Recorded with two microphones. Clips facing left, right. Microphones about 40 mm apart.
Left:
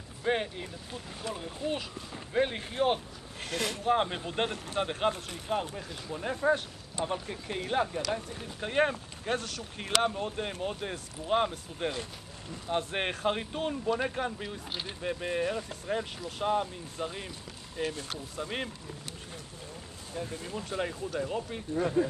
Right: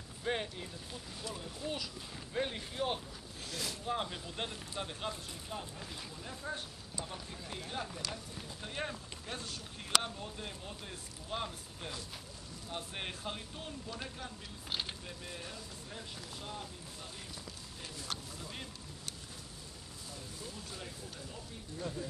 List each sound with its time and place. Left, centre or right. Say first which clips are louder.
0.2 s speech: left 7 dB; left
3.3 s speech: left 9 dB; left
14.7 s speech: left 2 dB; centre
15.0 s speech: left 15 dB; left
20.2 s speech: left 13 dB; left